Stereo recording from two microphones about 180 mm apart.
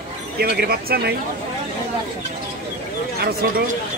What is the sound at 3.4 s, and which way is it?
Speech, 60° right (ahead or behind).